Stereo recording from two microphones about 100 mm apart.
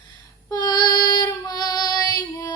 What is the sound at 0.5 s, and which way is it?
Child singing, 45° left (ahead or behind).